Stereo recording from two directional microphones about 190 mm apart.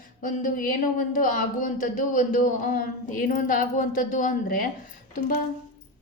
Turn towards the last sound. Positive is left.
turn(degrees=45)  # may be behind; listen again after turning